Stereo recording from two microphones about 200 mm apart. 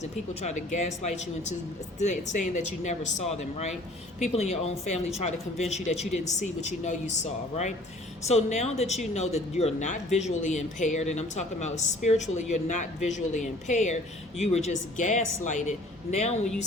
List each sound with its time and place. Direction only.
0.0 s speech: 35° left (ahead or behind)